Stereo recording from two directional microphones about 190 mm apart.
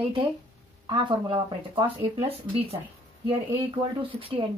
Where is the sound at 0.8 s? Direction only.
25° right (ahead or behind).